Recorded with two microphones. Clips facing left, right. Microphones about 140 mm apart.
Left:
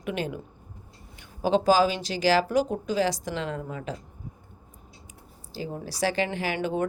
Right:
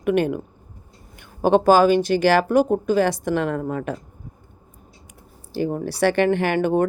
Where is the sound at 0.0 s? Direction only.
55° right (ahead or behind).